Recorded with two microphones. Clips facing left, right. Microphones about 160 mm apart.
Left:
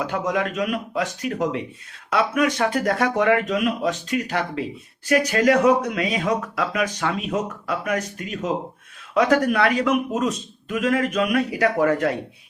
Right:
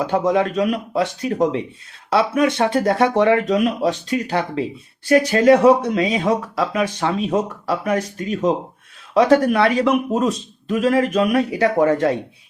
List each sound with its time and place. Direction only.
0.0 s a man's voice: 30° right (ahead or behind)